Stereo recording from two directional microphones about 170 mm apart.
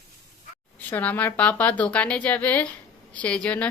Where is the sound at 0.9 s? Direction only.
10° left (ahead or behind).